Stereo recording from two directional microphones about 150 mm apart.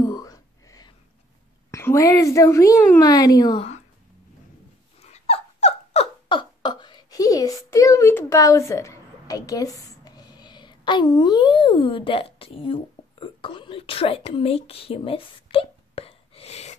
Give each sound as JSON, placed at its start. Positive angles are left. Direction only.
{"t": 0.0, "sound": "whispering", "side_deg": 25}
{"t": 1.7, "sound": "a woman's voice", "side_deg": 20}
{"t": 5.0, "sound": "dog", "side_deg": 45}